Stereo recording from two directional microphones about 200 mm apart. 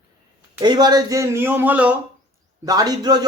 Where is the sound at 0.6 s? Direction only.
20° right (ahead or behind).